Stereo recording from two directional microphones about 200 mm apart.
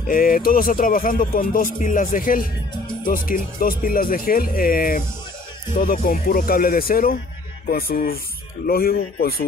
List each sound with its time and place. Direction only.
0.1 s speech: 45° left (ahead or behind)